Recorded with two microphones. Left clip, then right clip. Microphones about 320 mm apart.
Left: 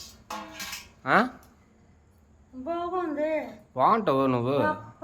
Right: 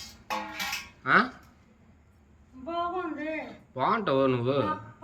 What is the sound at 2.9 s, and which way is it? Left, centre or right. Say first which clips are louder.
Speech: left 5 dB; centre.